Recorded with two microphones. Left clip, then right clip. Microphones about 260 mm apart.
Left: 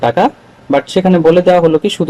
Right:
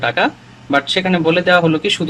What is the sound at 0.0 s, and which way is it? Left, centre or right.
A man's voice, left.